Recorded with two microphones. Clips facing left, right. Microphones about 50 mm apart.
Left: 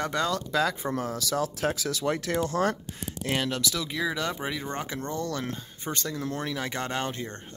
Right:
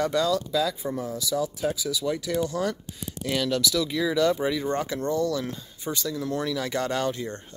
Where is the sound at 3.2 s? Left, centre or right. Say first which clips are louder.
Right 3 dB; left.